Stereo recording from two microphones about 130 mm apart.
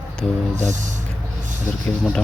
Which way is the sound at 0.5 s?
70° right (ahead or behind).